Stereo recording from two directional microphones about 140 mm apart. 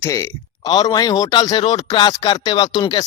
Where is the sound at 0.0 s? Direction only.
20° left (ahead or behind).